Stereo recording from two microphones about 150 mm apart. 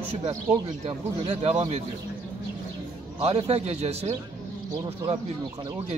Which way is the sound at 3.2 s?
45° right (ahead or behind).